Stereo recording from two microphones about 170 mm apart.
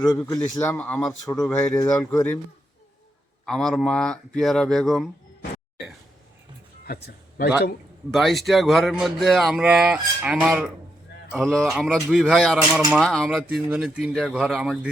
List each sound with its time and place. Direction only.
0.3 s speech: 20° left (ahead or behind)
1.2 s speech: 20° left (ahead or behind)
3.4 s speech: 5° left (ahead or behind)
6.8 s a man's voice: 65° left (ahead or behind)
8.1 s speech: centre (ahead or behind)